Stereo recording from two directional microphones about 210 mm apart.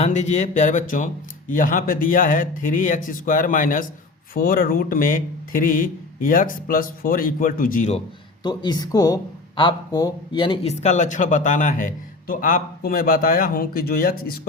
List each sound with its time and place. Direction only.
0.0 s speech: 35° left (ahead or behind)
8.4 s a man's voice: 20° left (ahead or behind); by 14.3 s 45° left (ahead or behind)